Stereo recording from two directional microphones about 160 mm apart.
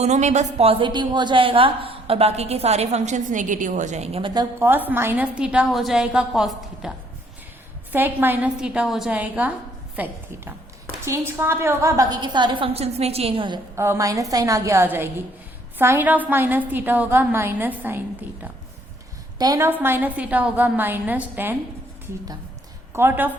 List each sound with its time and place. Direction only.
0.0 s a woman's voice: 45° right (ahead or behind)
4.6 s a woman's voice: 10° right (ahead or behind)
7.9 s a woman's voice: 10° right (ahead or behind); by 13.6 s 30° right (ahead or behind)
13.7 s a woman's voice: 15° right (ahead or behind)
19.4 s a woman's voice: 20° right (ahead or behind)
23.0 s a woman's voice: 10° right (ahead or behind)